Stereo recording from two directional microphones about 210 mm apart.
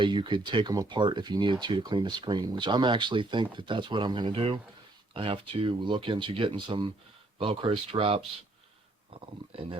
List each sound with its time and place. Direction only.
0.0 s speech: 25° right (ahead or behind)